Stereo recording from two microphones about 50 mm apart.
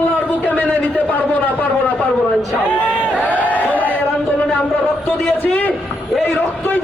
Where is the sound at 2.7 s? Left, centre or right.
Left.